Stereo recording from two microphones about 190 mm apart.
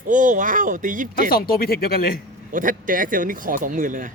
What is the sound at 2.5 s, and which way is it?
Speech, 45° right (ahead or behind).